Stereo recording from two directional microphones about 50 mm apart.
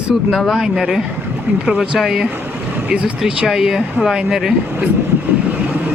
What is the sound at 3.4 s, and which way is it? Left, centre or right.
Speech, centre.